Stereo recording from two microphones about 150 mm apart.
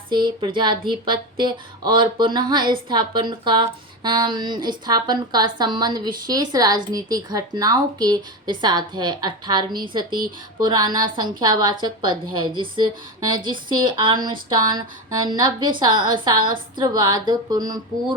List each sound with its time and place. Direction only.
0.1 s speech: 30° right (ahead or behind)